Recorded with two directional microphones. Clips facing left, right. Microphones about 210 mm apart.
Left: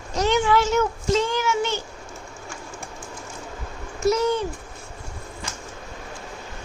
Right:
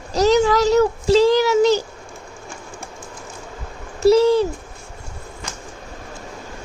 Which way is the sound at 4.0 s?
30° right (ahead or behind).